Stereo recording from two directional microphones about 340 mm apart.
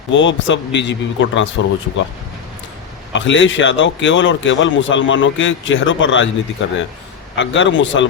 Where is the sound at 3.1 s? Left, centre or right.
Left.